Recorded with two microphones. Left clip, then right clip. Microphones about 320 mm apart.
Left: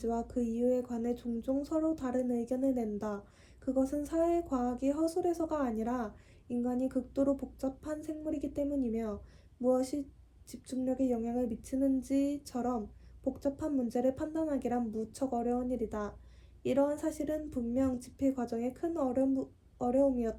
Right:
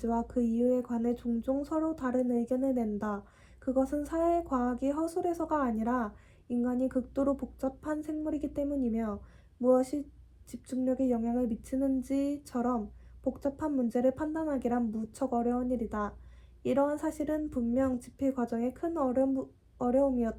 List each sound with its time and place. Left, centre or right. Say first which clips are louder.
0.0 s a woman's voice: right 3 dB; centre